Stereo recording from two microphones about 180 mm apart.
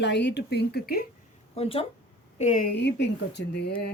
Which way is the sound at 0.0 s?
75° left (ahead or behind).